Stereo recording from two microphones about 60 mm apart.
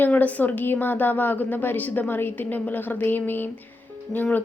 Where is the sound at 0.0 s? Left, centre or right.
Left.